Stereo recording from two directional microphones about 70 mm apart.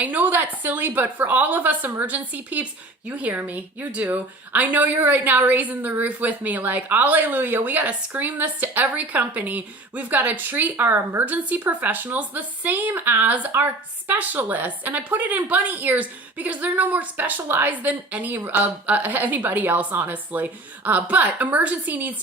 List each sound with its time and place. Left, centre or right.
0.0 s a woman's voice: right